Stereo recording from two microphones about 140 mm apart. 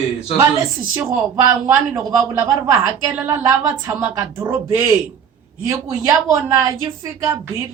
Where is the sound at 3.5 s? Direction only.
25° right (ahead or behind).